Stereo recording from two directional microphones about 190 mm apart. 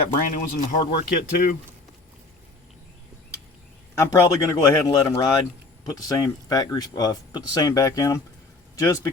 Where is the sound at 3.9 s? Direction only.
15° left (ahead or behind).